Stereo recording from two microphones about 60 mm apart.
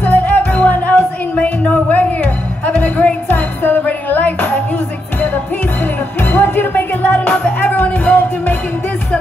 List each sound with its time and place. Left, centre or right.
0.0 s music: left
6.2 s music: left